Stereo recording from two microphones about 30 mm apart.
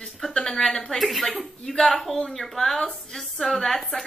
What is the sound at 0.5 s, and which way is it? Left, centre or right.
Speech, centre.